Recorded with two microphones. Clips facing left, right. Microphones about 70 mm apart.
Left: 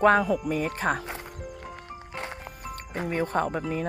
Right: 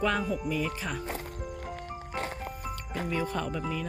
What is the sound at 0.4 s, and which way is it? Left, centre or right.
Speech, left.